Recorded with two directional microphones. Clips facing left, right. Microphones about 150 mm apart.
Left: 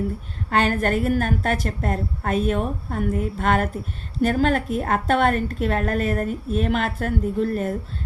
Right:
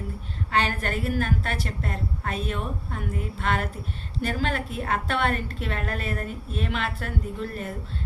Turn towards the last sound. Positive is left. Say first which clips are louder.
# left 9 dB
turn(degrees=45)  # may be behind; listen again after turning